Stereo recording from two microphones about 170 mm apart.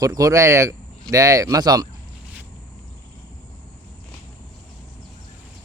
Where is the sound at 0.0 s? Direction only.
20° right (ahead or behind).